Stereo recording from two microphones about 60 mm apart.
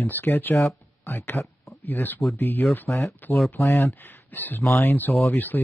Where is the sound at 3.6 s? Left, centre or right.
Left.